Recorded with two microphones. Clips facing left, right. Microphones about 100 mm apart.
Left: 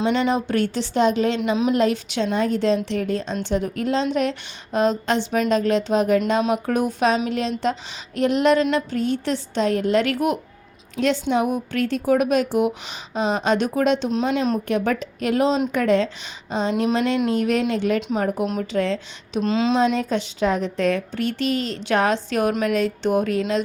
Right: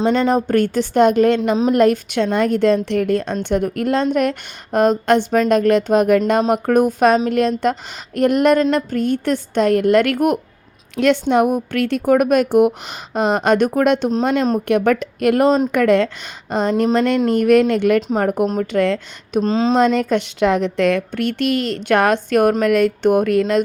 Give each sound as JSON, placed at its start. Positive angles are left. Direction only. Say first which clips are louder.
{"t": 0.0, "sound": "a woman's voice", "louder": "right 4 dB", "side_deg": -45}
{"t": 19.4, "sound": "speech", "louder": "right 4 dB", "side_deg": -35}
{"t": 19.8, "sound": "a woman's voice", "louder": "right 5 dB", "side_deg": -60}